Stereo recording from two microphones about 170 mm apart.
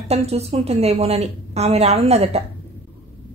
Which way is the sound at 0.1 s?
35° right (ahead or behind).